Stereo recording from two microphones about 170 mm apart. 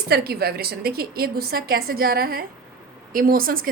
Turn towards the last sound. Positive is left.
turn(degrees=-60)  # may be behind; listen again after turning